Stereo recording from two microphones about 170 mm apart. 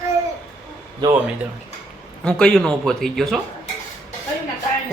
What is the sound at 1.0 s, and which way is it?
Speech, 25° right (ahead or behind).